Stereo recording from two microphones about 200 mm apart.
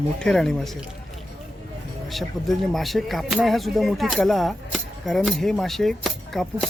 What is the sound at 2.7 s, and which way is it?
Speech, centre (ahead or behind).